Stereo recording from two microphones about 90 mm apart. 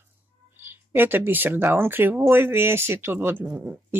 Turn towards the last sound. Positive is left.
turn(degrees=-15)  # may be behind; listen again after turning